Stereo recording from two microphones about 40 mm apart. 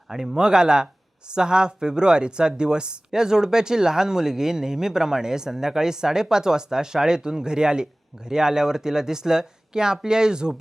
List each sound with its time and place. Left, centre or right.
0.1 s speech: centre